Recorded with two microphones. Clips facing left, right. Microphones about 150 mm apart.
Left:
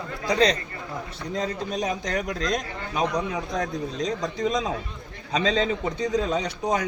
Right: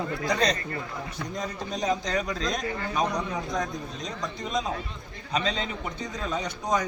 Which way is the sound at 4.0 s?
90° left.